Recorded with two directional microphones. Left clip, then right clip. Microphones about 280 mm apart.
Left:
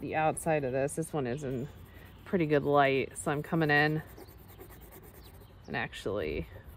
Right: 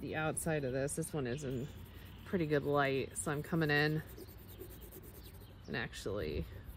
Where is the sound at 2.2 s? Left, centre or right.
Left.